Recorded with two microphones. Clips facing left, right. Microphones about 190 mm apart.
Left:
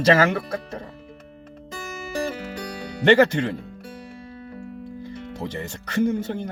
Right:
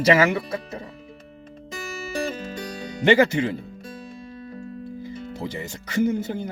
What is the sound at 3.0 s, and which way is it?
Speech, 10° right (ahead or behind).